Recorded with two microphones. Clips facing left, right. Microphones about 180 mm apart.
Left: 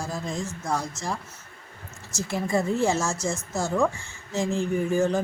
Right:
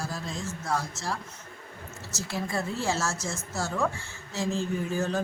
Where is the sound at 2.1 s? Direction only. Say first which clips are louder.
Left 6 dB; 15° left (ahead or behind).